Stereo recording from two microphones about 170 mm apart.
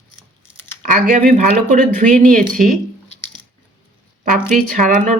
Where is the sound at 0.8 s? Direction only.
50° right (ahead or behind).